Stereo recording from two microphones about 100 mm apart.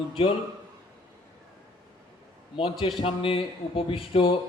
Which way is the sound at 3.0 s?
65° left (ahead or behind).